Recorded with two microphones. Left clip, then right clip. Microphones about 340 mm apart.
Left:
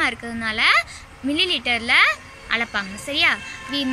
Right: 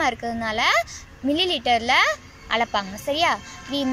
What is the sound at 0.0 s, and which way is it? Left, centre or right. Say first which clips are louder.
Speech: even; centre.